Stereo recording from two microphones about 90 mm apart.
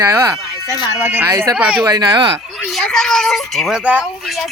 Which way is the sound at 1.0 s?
20° right (ahead or behind).